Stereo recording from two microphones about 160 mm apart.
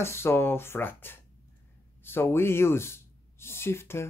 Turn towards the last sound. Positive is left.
turn(degrees=15)  # may be behind; listen again after turning